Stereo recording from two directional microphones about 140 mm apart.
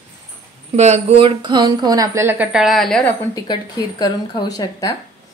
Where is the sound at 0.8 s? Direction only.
50° right (ahead or behind); by 3.0 s centre (ahead or behind).